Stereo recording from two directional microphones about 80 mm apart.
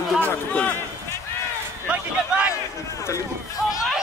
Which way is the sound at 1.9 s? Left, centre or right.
Centre.